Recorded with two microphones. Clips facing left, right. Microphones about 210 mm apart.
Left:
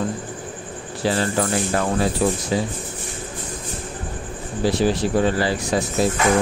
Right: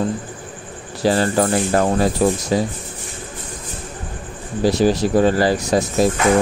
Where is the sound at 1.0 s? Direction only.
40° right (ahead or behind).